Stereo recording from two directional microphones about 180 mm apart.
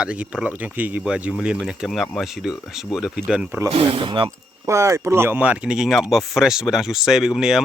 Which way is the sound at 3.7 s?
30° right (ahead or behind).